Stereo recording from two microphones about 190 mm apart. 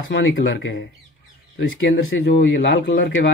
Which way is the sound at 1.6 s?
85° left.